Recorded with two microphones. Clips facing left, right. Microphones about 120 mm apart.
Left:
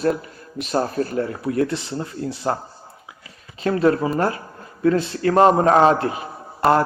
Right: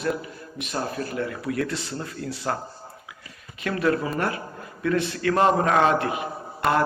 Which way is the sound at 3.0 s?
30° left (ahead or behind).